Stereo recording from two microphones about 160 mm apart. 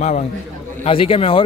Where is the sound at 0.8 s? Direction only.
35° left (ahead or behind).